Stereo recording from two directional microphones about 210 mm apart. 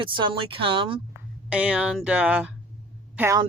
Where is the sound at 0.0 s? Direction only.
20° right (ahead or behind).